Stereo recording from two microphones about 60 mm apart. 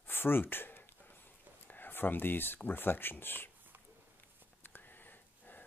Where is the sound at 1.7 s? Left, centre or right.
Left.